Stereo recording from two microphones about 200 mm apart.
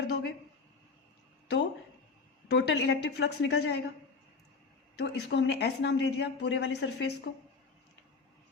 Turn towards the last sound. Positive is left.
turn(degrees=65)  # may be behind; listen again after turning